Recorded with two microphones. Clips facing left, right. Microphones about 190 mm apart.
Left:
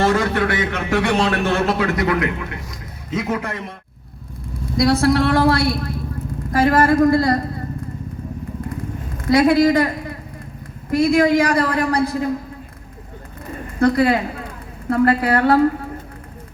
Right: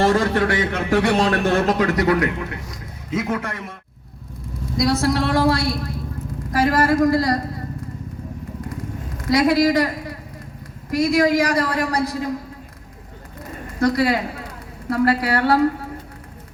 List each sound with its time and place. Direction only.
0.0 s a man's voice: 35° right (ahead or behind)
3.2 s a man's voice: 5° left (ahead or behind)
3.4 s a man's voice: 25° left (ahead or behind)
4.8 s a woman's voice: 60° left (ahead or behind)
9.3 s a woman's voice: 55° left (ahead or behind)
10.9 s a woman's voice: 55° left (ahead or behind)
13.7 s a man's voice: 55° left (ahead or behind)